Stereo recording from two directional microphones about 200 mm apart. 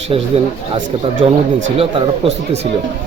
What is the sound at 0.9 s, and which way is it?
Speech, 25° right (ahead or behind).